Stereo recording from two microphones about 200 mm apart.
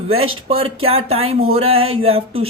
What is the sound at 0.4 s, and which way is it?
Speech, 30° right (ahead or behind).